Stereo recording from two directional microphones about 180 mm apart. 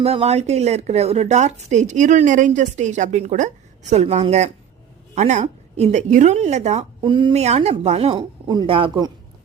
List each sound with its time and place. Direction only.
0.0 s speech: 30° right (ahead or behind)
7.0 s speech: 25° right (ahead or behind)
8.1 s speech: 25° right (ahead or behind)